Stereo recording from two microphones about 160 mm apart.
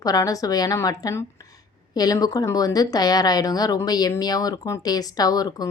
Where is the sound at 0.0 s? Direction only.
20° left (ahead or behind).